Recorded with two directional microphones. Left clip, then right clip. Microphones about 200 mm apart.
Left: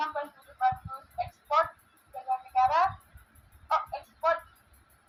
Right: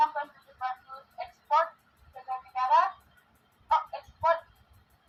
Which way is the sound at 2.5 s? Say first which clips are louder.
Even; 30° left (ahead or behind).